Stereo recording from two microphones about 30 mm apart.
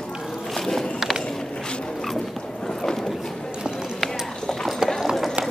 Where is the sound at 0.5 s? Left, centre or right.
Centre.